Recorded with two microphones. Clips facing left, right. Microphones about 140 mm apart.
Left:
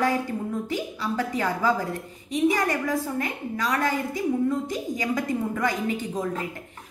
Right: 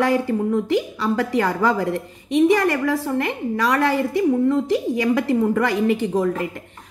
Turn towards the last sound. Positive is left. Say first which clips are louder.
# right 9 dB
turn(degrees=-70)  # may be behind; listen again after turning